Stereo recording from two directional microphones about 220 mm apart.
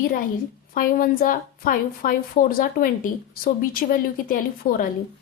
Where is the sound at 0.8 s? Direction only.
40° left (ahead or behind).